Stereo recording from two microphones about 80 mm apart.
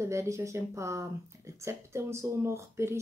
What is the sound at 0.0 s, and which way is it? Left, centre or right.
Speech, right.